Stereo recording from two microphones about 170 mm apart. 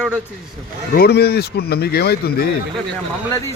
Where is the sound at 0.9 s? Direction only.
70° left (ahead or behind).